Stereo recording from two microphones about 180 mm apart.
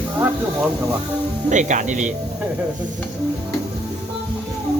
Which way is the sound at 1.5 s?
45° right (ahead or behind).